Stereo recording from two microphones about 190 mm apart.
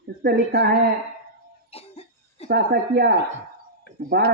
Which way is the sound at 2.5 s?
55° right (ahead or behind).